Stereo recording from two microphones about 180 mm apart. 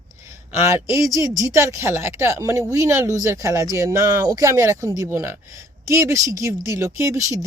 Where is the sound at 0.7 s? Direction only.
15° right (ahead or behind).